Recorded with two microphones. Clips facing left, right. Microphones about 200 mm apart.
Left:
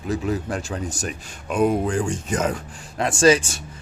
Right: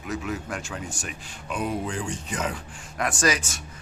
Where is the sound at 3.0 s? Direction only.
25° left (ahead or behind).